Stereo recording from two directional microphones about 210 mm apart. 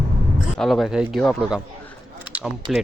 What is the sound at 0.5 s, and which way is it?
Speech, centre (ahead or behind).